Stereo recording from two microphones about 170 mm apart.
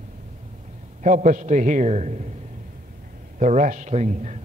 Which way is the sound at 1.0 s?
50° right (ahead or behind).